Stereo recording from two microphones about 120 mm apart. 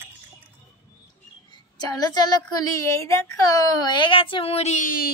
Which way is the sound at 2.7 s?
25° left (ahead or behind).